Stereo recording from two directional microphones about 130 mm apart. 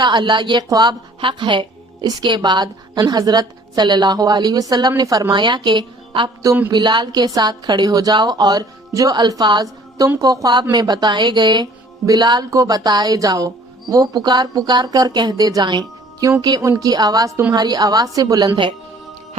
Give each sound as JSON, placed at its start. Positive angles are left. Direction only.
{"t": 0.0, "sound": "a woman's voice", "side_deg": -35}